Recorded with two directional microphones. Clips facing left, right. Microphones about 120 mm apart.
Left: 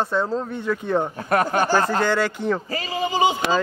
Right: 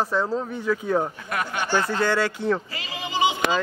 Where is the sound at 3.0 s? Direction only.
40° left (ahead or behind).